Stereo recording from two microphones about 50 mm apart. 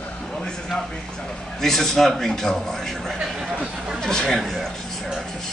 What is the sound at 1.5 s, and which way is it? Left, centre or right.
A man's voice, centre.